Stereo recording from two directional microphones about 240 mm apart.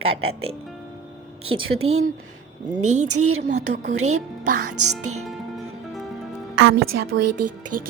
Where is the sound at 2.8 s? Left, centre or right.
Right.